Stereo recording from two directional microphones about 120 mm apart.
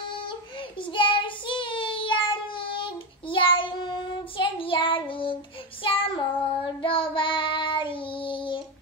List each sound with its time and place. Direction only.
0.2 s child singing: 45° left (ahead or behind)